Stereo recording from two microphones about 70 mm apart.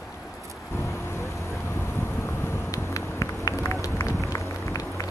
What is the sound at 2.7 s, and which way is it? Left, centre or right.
Run, left.